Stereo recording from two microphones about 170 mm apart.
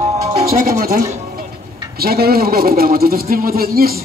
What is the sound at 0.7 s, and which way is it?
Speech, 60° right (ahead or behind).